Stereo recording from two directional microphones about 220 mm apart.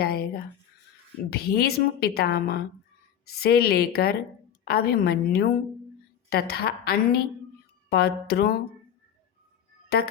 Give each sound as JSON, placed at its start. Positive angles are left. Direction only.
{"t": 0.0, "sound": "a woman's voice", "side_deg": 45}